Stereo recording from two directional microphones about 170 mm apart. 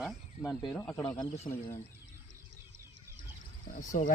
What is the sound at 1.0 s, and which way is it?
Speech, 15° left (ahead or behind).